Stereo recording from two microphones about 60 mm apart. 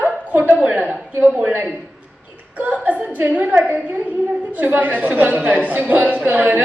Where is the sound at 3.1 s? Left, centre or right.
Right.